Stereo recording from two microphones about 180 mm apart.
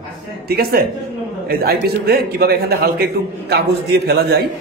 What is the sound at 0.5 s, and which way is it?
A man's voice, 55° right (ahead or behind).